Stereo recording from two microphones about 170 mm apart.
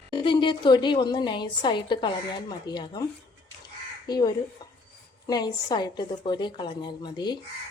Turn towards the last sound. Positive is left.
turn(degrees=25)  # may be behind; listen again after turning